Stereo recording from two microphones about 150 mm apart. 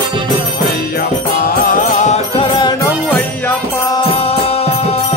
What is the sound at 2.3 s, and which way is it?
Music, 35° left (ahead or behind).